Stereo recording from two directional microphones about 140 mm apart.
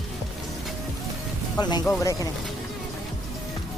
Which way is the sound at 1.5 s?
30° left (ahead or behind).